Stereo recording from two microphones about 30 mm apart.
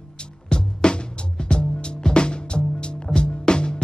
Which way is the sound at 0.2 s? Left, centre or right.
Left.